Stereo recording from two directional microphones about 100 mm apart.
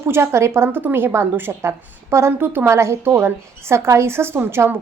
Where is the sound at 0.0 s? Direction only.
25° right (ahead or behind).